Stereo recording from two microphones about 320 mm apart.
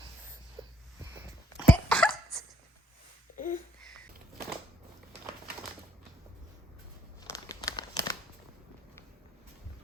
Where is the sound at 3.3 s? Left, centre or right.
Left.